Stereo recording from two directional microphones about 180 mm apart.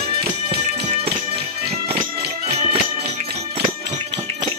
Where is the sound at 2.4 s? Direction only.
35° right (ahead or behind).